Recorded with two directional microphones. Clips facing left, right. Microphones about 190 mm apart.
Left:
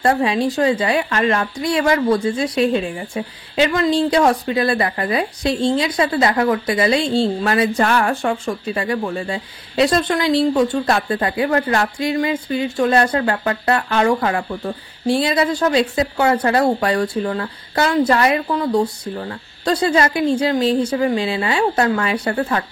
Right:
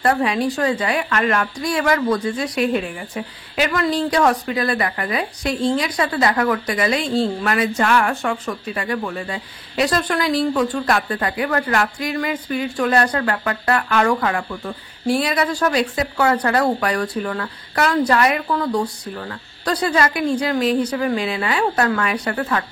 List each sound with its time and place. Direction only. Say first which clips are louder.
0.0 s a woman's voice: left 2 dB; 25° left (ahead or behind)